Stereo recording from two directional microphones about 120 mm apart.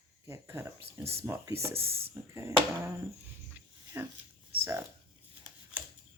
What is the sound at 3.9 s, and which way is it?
Speech, 20° right (ahead or behind).